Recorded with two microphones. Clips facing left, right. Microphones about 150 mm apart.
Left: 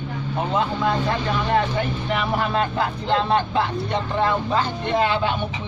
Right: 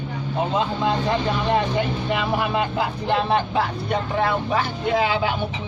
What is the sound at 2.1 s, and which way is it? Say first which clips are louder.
A man's voice: left 1 dB; 15° right (ahead or behind).